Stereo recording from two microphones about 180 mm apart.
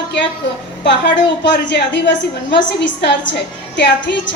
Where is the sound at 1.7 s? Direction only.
80° left.